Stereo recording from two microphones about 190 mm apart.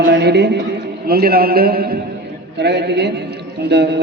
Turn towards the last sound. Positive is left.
turn(degrees=-60)  # may be behind; listen again after turning